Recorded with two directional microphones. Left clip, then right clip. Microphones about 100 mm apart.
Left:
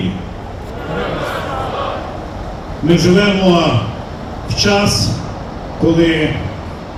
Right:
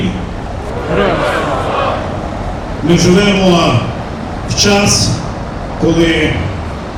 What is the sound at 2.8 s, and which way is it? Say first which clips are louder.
A man's voice: right 1 dB; 35° right (ahead or behind).